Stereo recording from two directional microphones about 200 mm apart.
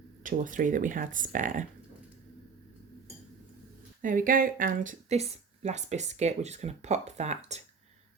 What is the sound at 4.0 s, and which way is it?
Speech, 40° right (ahead or behind).